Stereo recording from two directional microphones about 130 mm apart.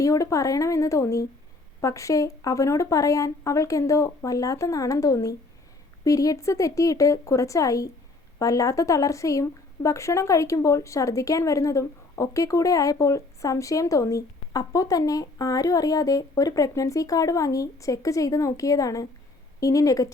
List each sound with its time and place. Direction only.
0.0 s speech: 25° left (ahead or behind)